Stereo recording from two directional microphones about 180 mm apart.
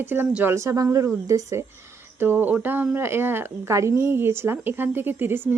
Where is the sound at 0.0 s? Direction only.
10° right (ahead or behind).